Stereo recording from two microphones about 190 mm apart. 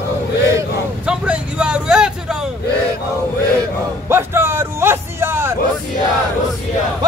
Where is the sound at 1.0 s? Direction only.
5° right (ahead or behind).